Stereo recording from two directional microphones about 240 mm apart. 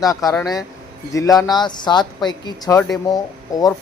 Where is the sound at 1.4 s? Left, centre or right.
Centre.